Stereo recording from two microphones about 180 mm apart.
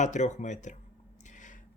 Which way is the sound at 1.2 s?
45° left (ahead or behind).